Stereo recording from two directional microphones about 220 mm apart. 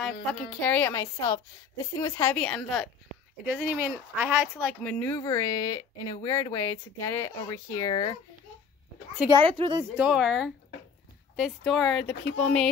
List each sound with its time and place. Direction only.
0.0 s speech: 5° left (ahead or behind); by 8.2 s 20° left (ahead or behind)
9.3 s speech: 20° right (ahead or behind)
9.9 s speech: 5° right (ahead or behind)